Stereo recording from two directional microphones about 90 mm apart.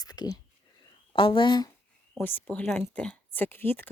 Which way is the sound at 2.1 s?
20° left (ahead or behind).